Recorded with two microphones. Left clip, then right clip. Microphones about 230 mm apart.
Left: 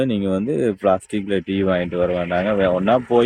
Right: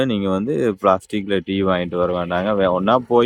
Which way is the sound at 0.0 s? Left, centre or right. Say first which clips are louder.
Right 1 dB; centre.